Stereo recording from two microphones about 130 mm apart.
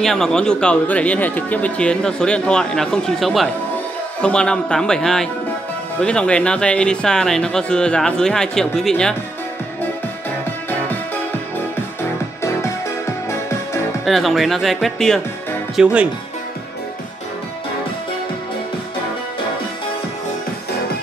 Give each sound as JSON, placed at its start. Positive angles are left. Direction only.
{"t": 0.0, "sound": "speech", "side_deg": 5}
{"t": 11.5, "sound": "music", "side_deg": 20}
{"t": 14.0, "sound": "speech", "side_deg": 0}
{"t": 15.7, "sound": "speech", "side_deg": -10}